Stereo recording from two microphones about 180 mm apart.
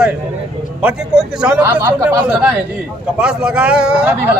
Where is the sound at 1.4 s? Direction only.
10° right (ahead or behind).